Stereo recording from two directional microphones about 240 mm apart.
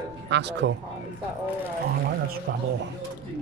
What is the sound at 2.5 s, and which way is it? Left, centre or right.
Speech, right.